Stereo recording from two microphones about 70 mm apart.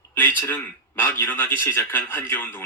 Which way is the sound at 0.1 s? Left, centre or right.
Left.